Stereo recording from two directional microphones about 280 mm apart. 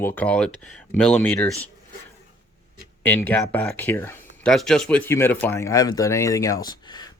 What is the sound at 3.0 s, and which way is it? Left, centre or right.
Speech, centre.